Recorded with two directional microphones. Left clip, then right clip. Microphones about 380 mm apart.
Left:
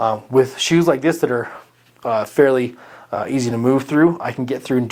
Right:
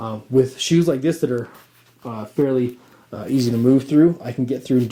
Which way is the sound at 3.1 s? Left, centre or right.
Left.